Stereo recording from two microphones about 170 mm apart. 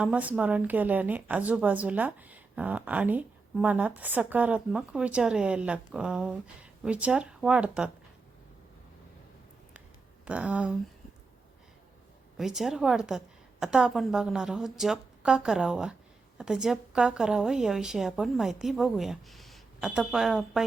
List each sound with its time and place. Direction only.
0.0 s a woman's voice: 10° right (ahead or behind)
10.2 s a woman's voice: 10° right (ahead or behind)
12.4 s a woman's voice: centre (ahead or behind)